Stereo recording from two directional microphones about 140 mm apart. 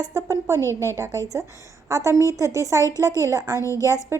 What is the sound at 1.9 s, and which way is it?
A woman's voice, 20° right (ahead or behind).